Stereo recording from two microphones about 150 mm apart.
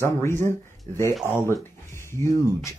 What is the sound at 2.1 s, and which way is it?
Speech, 20° left (ahead or behind).